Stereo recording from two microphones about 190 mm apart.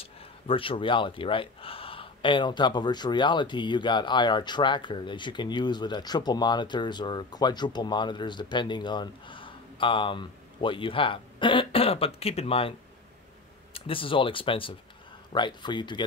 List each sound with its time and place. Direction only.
0.0 s speech: 30° left (ahead or behind)
13.7 s speech: 30° left (ahead or behind)